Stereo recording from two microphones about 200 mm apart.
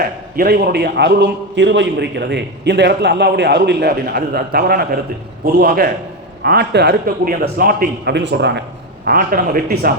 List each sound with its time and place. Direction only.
0.0 s a man's voice: 50° right (ahead or behind)
9.0 s speech: 45° right (ahead or behind)